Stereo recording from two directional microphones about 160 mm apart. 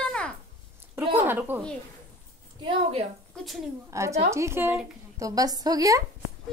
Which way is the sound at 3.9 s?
20° right (ahead or behind).